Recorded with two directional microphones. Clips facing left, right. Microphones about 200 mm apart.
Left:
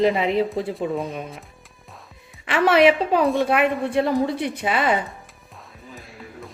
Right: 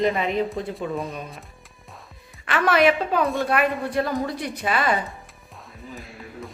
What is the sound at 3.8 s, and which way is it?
Speech, 25° left (ahead or behind).